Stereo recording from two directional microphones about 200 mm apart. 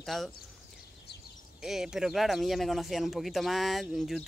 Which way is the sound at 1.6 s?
Centre (ahead or behind).